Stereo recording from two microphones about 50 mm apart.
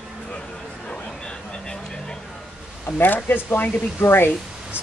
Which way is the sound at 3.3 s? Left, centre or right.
Left.